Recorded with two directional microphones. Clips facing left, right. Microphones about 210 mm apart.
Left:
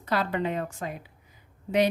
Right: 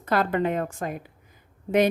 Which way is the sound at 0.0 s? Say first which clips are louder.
Right 4 dB; 50° right (ahead or behind).